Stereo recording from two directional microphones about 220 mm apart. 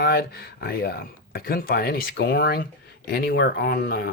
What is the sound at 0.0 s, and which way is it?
Speech, 45° left (ahead or behind).